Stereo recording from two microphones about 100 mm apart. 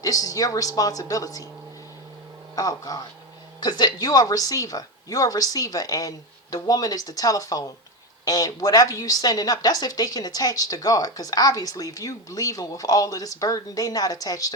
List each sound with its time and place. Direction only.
0.0 s speech: 35° left (ahead or behind)
2.6 s speech: 35° left (ahead or behind)